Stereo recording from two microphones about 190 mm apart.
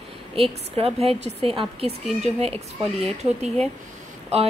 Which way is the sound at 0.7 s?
30° right (ahead or behind).